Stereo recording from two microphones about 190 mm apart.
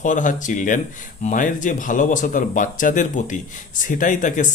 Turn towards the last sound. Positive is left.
turn(degrees=40)  # may be behind; listen again after turning